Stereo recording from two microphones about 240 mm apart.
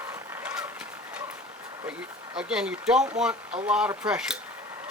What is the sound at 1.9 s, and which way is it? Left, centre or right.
Speech, centre.